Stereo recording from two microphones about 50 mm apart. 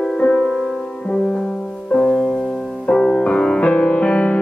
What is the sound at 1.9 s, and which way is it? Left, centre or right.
Music, left.